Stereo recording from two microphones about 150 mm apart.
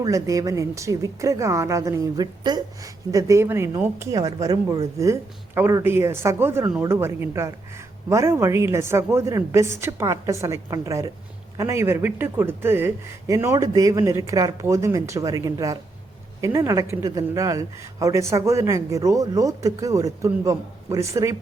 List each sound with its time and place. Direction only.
0.0 s a woman's voice: 20° right (ahead or behind)